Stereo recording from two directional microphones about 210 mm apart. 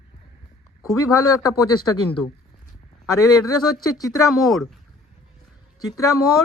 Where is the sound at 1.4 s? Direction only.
15° left (ahead or behind).